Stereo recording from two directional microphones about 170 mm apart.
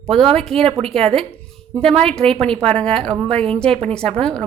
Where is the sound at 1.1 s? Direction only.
5° left (ahead or behind).